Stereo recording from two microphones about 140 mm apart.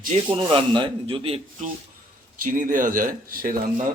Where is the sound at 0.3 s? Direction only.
40° right (ahead or behind).